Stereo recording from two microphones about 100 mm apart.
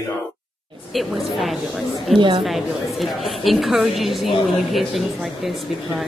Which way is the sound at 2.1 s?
55° right (ahead or behind).